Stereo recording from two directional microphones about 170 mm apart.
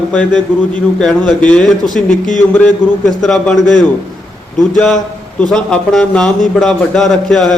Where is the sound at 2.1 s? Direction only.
45° left (ahead or behind).